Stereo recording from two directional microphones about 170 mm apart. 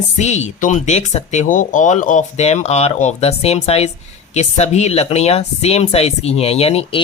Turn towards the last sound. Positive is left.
turn(degrees=35)  # may be behind; listen again after turning